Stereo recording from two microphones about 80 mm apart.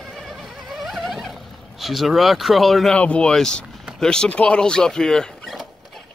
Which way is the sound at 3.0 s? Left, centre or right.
Centre.